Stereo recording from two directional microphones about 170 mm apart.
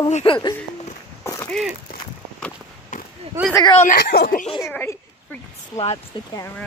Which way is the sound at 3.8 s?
55° left (ahead or behind).